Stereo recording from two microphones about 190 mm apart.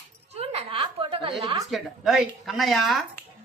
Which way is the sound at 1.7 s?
Centre (ahead or behind).